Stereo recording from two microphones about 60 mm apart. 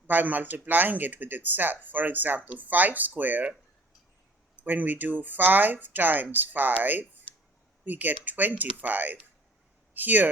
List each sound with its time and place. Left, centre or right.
0.1 s speech: right
4.5 s speech: right